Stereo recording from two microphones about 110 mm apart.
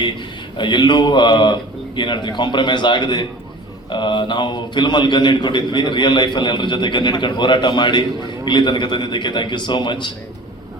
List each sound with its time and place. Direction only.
0.5 s a man's voice: 45° left (ahead or behind)